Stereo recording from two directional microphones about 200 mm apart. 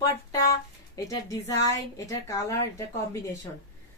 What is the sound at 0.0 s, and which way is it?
A woman's voice, 15° left (ahead or behind).